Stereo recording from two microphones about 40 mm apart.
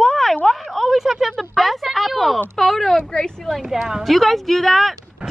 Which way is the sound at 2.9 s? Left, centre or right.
Centre.